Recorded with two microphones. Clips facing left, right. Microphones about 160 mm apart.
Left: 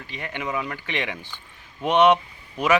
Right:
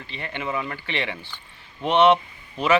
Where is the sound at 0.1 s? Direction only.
10° left (ahead or behind).